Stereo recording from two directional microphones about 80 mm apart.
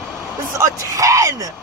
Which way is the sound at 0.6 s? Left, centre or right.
Right.